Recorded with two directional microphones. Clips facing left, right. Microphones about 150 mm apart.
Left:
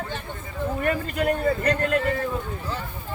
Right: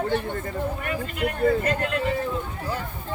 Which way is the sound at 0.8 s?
40° left (ahead or behind).